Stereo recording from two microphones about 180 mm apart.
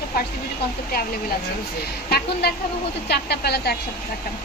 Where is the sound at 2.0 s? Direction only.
60° left (ahead or behind).